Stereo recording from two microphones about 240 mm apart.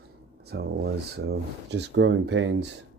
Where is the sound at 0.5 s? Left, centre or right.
Right.